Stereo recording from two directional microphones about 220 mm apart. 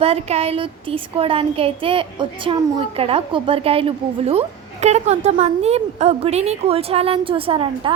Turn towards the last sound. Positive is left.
turn(degrees=-25)  # may be behind; listen again after turning